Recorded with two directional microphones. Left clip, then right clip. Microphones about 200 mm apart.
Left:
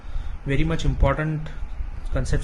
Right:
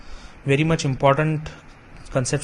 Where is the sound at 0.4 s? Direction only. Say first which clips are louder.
Right 6 dB; 20° right (ahead or behind).